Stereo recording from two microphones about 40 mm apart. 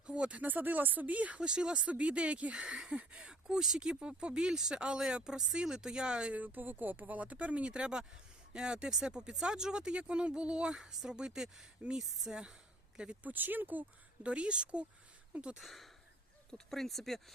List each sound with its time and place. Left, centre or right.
0.1 s a sound: right
0.4 s speech: right
1.4 s speech: right
3.4 s speech: centre
3.8 s speech: right
6.3 s speech: right
7.2 s speech: right
10.7 s a woman's voice: centre
12.3 s speech: right
13.2 s speech: right
14.3 s speech: right
15.5 s speech: centre
16.5 s speech: centre